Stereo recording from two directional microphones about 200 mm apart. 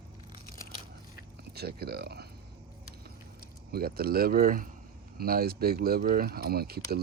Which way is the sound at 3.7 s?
50° right (ahead or behind).